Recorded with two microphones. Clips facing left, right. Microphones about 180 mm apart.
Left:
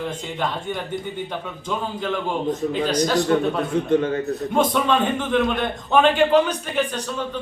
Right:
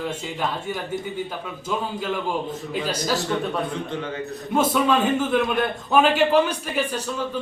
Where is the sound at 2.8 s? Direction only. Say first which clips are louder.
Left 4 dB; 5° right (ahead or behind).